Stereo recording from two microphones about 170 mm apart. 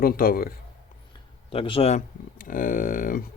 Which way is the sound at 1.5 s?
30° left (ahead or behind).